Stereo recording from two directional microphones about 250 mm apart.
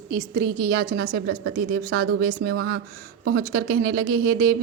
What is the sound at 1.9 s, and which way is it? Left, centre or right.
A woman's voice, right.